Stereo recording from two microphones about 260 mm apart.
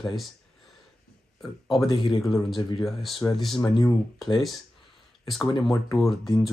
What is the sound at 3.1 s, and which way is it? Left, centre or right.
Speech, centre.